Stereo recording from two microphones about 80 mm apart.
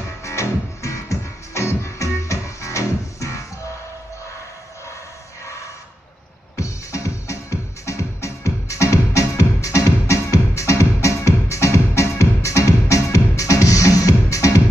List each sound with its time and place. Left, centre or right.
0.2 s music: left
6.6 s music: left